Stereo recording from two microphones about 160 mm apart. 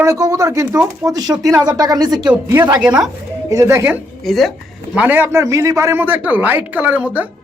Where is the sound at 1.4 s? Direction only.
Centre (ahead or behind).